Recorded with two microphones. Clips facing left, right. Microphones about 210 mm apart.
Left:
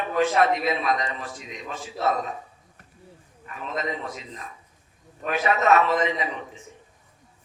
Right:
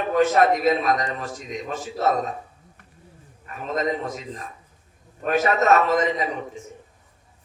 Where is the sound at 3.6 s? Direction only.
45° right (ahead or behind).